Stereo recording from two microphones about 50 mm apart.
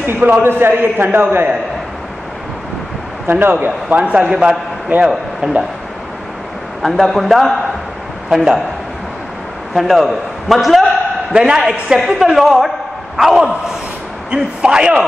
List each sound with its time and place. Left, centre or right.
0.0 s a man's voice: right
3.3 s a man's voice: right
3.5 s a man's voice: right
4.0 s a man's voice: right
6.8 s a man's voice: centre
9.8 s a man's voice: centre
11.3 s a man's voice: centre
12.3 s a man's voice: centre
14.3 s a man's voice: centre